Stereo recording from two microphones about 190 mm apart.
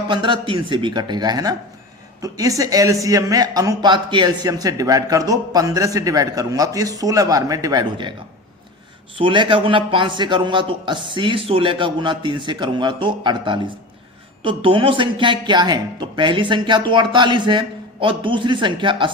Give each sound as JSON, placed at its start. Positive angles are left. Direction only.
{"t": 0.1, "sound": "a man's voice", "side_deg": -25}
{"t": 9.1, "sound": "a man's voice", "side_deg": -25}